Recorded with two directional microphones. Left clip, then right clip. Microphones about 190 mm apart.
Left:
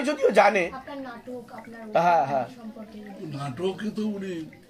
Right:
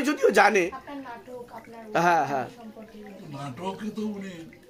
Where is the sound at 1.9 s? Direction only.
45° right (ahead or behind).